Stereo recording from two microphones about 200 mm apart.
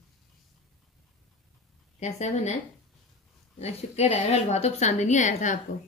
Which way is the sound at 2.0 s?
35° left (ahead or behind).